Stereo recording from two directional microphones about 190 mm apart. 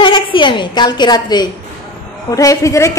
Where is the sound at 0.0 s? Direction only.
25° left (ahead or behind).